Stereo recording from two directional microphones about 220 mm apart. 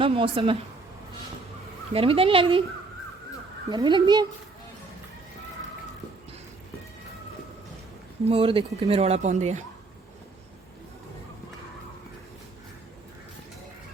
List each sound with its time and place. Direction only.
0.0 s speech: 25° right (ahead or behind)
1.9 s speech: 25° right (ahead or behind)
3.7 s speech: 20° right (ahead or behind)
8.3 s speech: 25° right (ahead or behind)